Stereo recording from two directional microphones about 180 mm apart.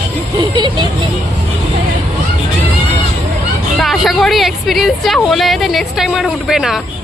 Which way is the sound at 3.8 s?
Centre (ahead or behind).